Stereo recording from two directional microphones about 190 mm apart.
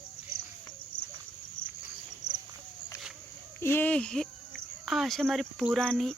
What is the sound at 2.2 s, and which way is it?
Cricket, 20° right (ahead or behind).